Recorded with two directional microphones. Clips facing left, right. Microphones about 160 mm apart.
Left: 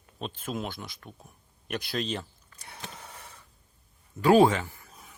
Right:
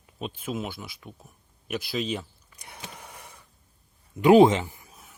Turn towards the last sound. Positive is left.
turn(degrees=-15)  # may be behind; listen again after turning